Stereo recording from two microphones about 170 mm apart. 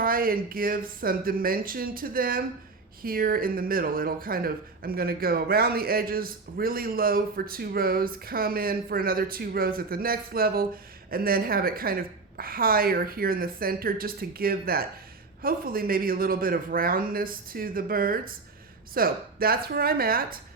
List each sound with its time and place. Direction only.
0.0 s speech: 60° right (ahead or behind)